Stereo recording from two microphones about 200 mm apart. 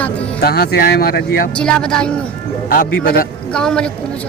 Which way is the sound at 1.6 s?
5° left (ahead or behind).